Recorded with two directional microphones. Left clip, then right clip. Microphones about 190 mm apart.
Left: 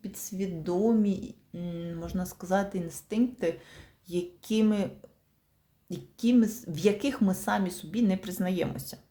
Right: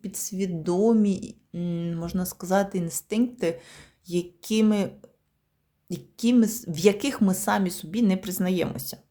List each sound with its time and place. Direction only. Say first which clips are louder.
0.0 s speech: right 5 dB; 25° right (ahead or behind)
5.9 s speech: right 3 dB; 30° right (ahead or behind)